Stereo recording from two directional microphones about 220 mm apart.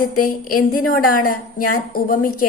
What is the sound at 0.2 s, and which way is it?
A woman's voice, 40° left (ahead or behind).